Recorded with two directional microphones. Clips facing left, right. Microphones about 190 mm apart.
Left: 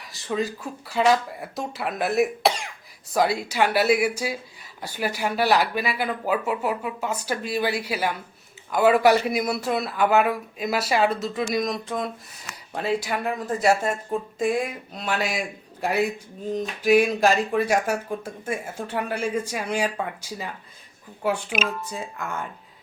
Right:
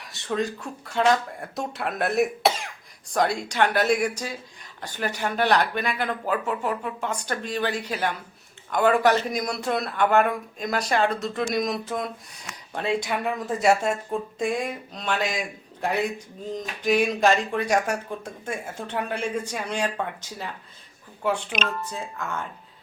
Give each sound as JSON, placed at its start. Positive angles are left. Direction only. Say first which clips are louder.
{"t": 0.0, "sound": "a man's voice", "louder": "even", "side_deg": 0}